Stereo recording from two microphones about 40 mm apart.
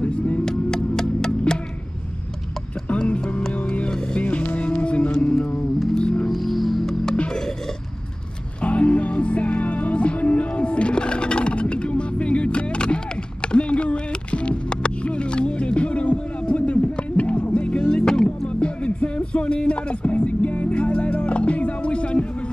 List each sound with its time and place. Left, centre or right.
0.0 s vehicle: left
0.5 s a sound: centre
2.9 s music: left
4.2 s music: left
5.2 s music: left
6.2 s music: centre
8.5 s music: left
16.4 s a sound: left
17.2 s music: left
17.8 s vehicle: centre
18.5 s music: left